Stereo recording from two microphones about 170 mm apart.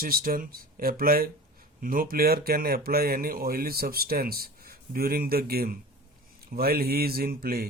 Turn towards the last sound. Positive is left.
turn(degrees=-60)  # may be behind; listen again after turning